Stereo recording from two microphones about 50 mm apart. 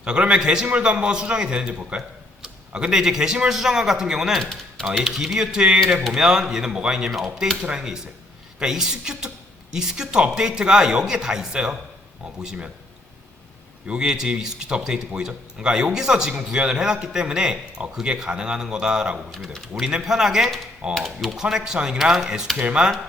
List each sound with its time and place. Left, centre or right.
0.0 s a man's voice: right
2.0 s a sound: centre
3.0 s speech: centre
13.8 s a man's voice: centre
20.9 s speech: centre
21.2 s speech: centre
22.5 s a man's voice: right